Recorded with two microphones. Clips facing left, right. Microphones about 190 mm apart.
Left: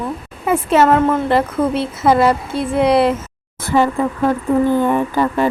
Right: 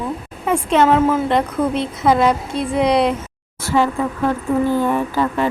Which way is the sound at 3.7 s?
15° left (ahead or behind).